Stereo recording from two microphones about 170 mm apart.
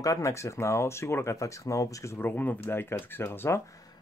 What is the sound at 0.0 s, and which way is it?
Speech, 20° left (ahead or behind).